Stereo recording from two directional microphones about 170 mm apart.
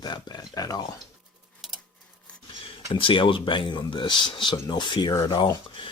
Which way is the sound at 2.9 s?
30° left (ahead or behind).